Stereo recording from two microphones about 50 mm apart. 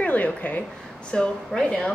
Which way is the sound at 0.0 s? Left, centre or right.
Left.